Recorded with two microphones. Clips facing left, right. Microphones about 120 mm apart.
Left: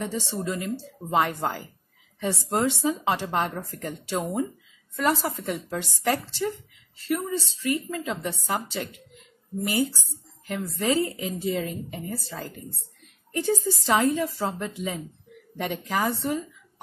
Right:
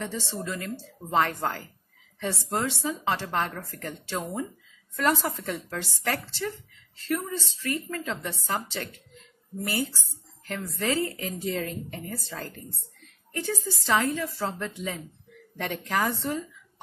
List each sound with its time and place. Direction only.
0.0 s a woman's voice: 15° left (ahead or behind)
0.4 s speech: 25° left (ahead or behind)
1.1 s a woman's voice: 10° left (ahead or behind)
4.2 s speech: 25° left (ahead or behind)
4.9 s a woman's voice: centre (ahead or behind)
5.5 s a woman's voice: 15° left (ahead or behind)
13.3 s a woman's voice: 20° left (ahead or behind)